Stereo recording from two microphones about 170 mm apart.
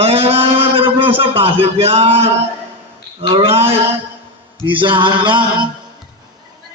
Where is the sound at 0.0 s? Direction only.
35° right (ahead or behind).